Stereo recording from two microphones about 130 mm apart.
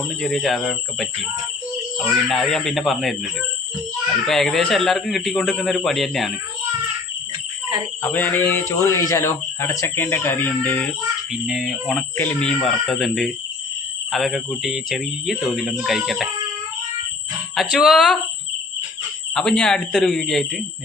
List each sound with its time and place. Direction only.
0.2 s speech: 5° left (ahead or behind)
2.3 s speech: 5° left (ahead or behind)
4.3 s speech: 5° left (ahead or behind)
8.0 s speech: 15° left (ahead or behind)
11.4 s speech: 5° right (ahead or behind)
12.1 s speech: 15° left (ahead or behind)
17.5 s speech: centre (ahead or behind)
19.3 s speech: 5° left (ahead or behind)